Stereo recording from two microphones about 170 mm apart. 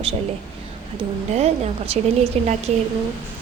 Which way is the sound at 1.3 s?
40° right (ahead or behind).